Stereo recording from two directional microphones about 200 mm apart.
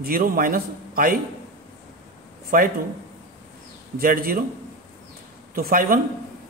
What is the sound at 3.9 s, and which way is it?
Speech, 45° right (ahead or behind).